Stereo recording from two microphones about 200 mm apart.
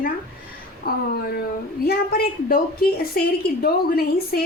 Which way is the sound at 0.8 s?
50° left (ahead or behind).